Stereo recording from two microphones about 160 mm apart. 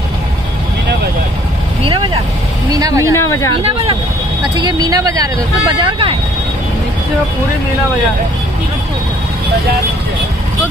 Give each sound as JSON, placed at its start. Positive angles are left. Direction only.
{"t": 2.7, "sound": "speech", "side_deg": -20}
{"t": 3.2, "sound": "speech", "side_deg": 15}
{"t": 4.6, "sound": "speech", "side_deg": -25}
{"t": 5.9, "sound": "speech", "side_deg": -35}